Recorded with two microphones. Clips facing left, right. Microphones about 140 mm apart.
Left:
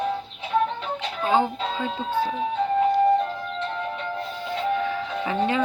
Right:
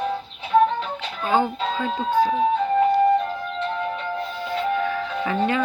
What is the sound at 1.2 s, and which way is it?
Speech, 25° left (ahead or behind).